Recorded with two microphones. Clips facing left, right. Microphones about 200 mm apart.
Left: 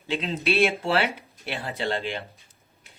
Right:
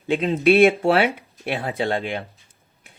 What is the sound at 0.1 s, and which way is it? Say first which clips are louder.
Speech: right 9 dB; 55° right (ahead or behind).